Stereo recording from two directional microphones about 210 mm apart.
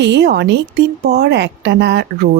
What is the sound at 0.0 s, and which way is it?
A woman's voice, 55° right (ahead or behind).